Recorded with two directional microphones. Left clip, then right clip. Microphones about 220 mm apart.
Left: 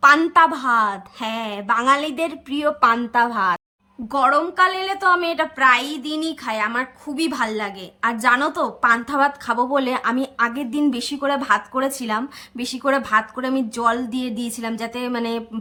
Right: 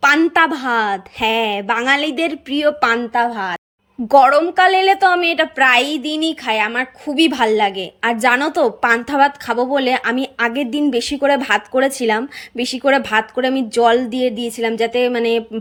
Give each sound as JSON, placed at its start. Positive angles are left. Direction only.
{"t": 0.0, "sound": "a woman's voice", "side_deg": -10}
{"t": 2.6, "sound": "a woman's voice", "side_deg": 40}
{"t": 3.1, "sound": "a woman's voice", "side_deg": 0}
{"t": 4.1, "sound": "a woman's voice", "side_deg": -15}